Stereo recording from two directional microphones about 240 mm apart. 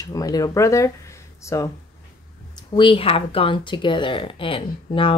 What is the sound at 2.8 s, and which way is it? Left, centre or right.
Speech, left.